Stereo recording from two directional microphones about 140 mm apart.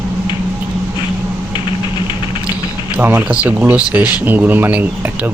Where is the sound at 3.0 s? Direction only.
15° right (ahead or behind).